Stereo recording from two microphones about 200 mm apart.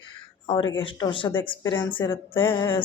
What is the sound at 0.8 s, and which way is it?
Speech, 20° left (ahead or behind).